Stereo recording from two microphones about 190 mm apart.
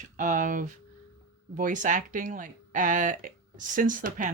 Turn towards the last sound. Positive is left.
turn(degrees=-45)  # may be behind; listen again after turning